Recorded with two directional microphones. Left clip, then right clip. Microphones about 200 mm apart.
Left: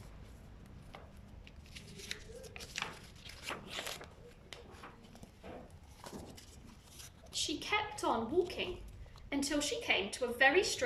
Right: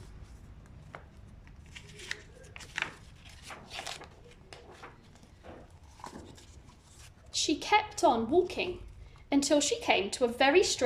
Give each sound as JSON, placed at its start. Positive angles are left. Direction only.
{"t": 1.7, "sound": "shuffling cards", "side_deg": 15}
{"t": 3.8, "sound": "a sound", "side_deg": 0}
{"t": 7.3, "sound": "a woman's voice", "side_deg": -25}